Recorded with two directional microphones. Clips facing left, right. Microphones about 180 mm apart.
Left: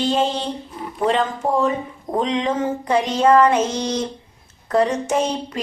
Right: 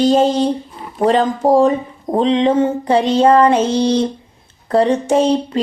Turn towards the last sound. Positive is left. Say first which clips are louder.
# right 7 dB
turn(degrees=-30)  # may be behind; listen again after turning